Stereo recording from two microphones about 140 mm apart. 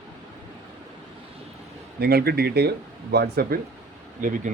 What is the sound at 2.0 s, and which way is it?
Speech, 90° right.